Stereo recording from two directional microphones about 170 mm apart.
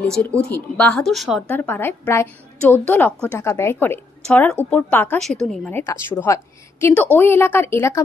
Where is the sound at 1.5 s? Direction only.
10° left (ahead or behind).